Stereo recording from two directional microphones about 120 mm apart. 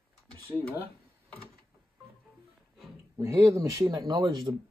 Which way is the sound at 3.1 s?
25° right (ahead or behind).